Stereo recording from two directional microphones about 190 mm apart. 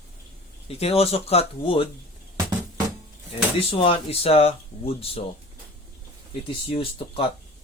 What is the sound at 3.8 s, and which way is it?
Speech, 30° left (ahead or behind).